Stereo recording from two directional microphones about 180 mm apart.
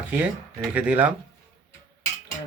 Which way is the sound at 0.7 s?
10° right (ahead or behind).